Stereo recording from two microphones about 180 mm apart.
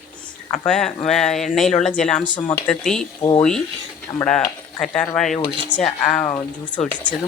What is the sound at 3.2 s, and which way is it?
Speech, 25° left (ahead or behind).